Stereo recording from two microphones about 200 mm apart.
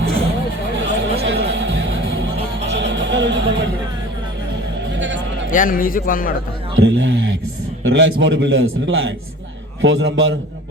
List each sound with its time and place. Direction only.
0.7 s a sound: 60° right (ahead or behind)
1.2 s music: 60° right (ahead or behind)
4.9 s music: 65° right (ahead or behind)
5.5 s a man's voice: 45° left (ahead or behind)
6.7 s a man's voice: 65° right (ahead or behind)